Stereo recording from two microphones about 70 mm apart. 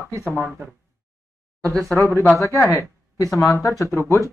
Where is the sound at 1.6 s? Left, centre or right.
Right.